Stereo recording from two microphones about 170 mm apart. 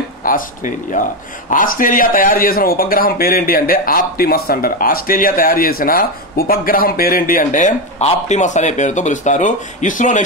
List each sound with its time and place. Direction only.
0.2 s speech: 55° left (ahead or behind)